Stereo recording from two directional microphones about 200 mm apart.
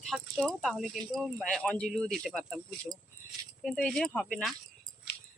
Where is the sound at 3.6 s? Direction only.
5° left (ahead or behind).